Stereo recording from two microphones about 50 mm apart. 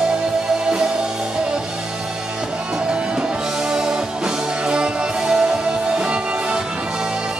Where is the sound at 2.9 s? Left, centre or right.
Centre.